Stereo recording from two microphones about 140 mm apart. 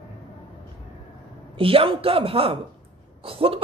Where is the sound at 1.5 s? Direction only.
40° right (ahead or behind).